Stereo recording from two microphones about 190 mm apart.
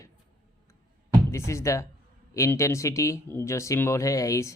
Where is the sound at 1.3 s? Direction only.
15° left (ahead or behind).